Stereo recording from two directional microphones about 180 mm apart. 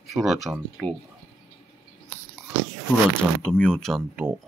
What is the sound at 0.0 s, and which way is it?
Speech, centre (ahead or behind).